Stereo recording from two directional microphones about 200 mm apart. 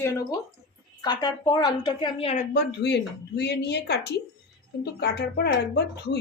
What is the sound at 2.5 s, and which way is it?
Speech, 55° left (ahead or behind).